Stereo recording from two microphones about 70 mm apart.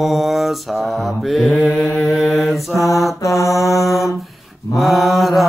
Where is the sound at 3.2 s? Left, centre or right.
Left.